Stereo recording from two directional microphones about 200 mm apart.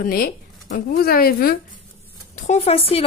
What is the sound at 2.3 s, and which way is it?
Speech, 35° left (ahead or behind).